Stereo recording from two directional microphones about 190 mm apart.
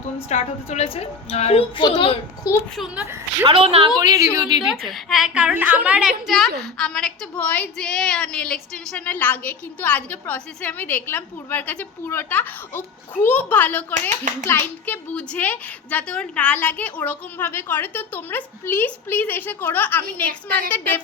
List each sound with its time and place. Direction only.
0.3 s a woman's voice: 35° left (ahead or behind)
2.7 s a woman's voice: centre (ahead or behind)
3.4 s a woman's voice: 30° right (ahead or behind)
4.6 s a woman's voice: centre (ahead or behind)